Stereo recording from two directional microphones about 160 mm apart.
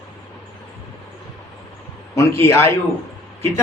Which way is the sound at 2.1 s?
20° left (ahead or behind).